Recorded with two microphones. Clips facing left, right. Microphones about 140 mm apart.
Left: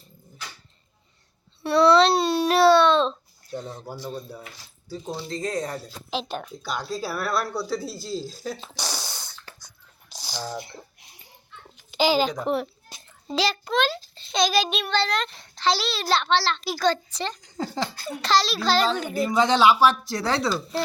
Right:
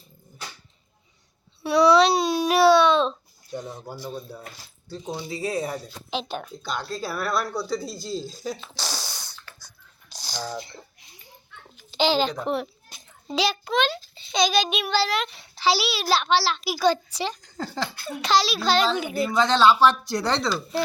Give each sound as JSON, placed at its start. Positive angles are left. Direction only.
{"t": 1.6, "sound": "babbling", "side_deg": -5}
{"t": 4.9, "sound": "speech", "side_deg": 0}
{"t": 5.8, "sound": "a child's voice", "side_deg": 0}
{"t": 8.9, "sound": "sneeze", "side_deg": 15}
{"t": 10.1, "sound": "squish", "side_deg": 5}
{"t": 11.9, "sound": "a child's voice", "side_deg": 5}
{"t": 19.4, "sound": "speech", "side_deg": 15}